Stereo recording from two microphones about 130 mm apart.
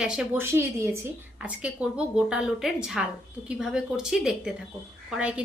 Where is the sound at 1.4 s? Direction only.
10° right (ahead or behind).